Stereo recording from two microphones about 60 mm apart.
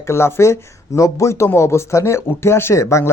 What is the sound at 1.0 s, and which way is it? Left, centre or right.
Speech, left.